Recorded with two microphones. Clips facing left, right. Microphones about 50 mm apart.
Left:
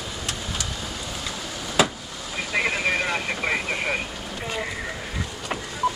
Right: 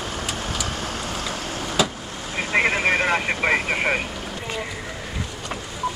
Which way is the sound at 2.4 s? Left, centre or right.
Right.